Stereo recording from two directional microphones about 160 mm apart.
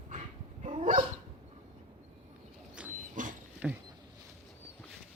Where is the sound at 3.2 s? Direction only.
55° right (ahead or behind).